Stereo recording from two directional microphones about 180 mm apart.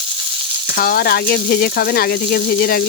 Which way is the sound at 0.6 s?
55° left (ahead or behind).